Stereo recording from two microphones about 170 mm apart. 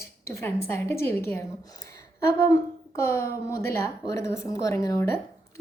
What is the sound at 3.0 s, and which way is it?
A woman's voice, 15° left (ahead or behind).